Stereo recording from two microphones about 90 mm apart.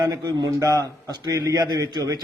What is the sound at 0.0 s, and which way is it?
A man's voice, 45° right (ahead or behind).